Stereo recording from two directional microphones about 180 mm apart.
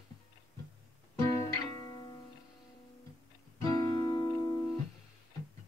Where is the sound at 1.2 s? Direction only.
15° left (ahead or behind).